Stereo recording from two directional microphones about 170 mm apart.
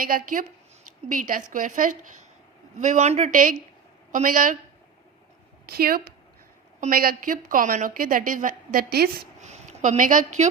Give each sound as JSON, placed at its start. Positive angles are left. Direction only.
{"t": 0.0, "sound": "a woman's voice", "side_deg": -55}
{"t": 5.6, "sound": "a woman's voice", "side_deg": -65}
{"t": 9.4, "sound": "a woman's voice", "side_deg": -45}